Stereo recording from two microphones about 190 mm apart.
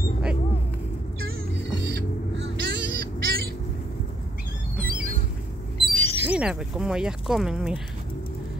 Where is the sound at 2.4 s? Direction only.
65° right (ahead or behind).